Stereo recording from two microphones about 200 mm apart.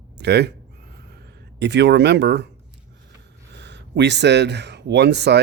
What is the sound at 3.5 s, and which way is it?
Speech, 60° right (ahead or behind).